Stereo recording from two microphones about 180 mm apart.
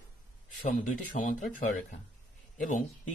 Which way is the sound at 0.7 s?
50° left (ahead or behind).